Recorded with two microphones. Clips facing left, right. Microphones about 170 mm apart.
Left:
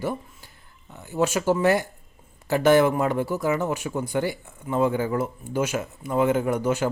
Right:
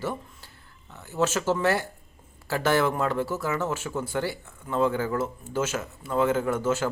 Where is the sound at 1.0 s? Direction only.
15° left (ahead or behind).